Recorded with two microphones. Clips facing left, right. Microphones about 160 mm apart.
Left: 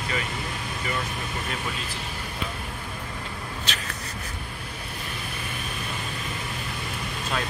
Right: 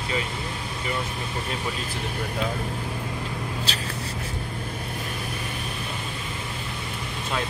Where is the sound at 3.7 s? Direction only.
35° right (ahead or behind).